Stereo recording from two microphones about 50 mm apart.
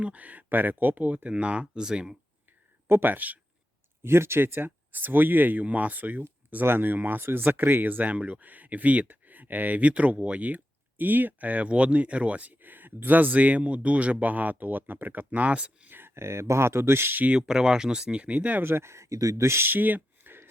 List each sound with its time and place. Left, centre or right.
0.0 s speech: right
1.3 s speech: right
2.8 s speech: right
4.0 s speech: right
15.4 s speech: right
15.9 s speech: right
17.3 s speech: centre
18.6 s speech: right
19.5 s a sound: right